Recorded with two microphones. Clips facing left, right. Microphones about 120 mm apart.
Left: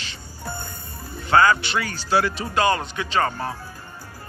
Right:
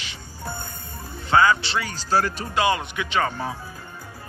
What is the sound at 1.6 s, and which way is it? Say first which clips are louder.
Speech: left 1 dB; 25° right (ahead or behind).